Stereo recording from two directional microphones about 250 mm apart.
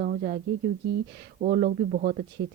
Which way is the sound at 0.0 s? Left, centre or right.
Right.